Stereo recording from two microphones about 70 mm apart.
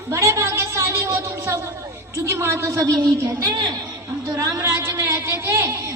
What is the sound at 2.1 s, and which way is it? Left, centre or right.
Speech, right.